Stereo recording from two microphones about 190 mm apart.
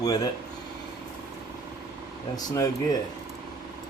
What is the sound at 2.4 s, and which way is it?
Speech, 20° left (ahead or behind).